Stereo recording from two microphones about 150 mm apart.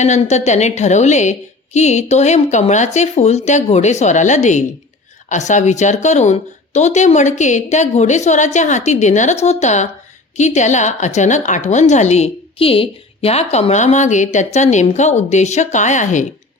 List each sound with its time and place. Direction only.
0.0 s a woman's voice: 50° left (ahead or behind)